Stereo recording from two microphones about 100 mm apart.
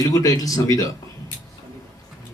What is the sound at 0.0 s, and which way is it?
Speech, 35° left (ahead or behind).